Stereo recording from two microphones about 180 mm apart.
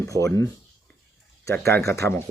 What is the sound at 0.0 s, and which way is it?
Speech, 15° left (ahead or behind).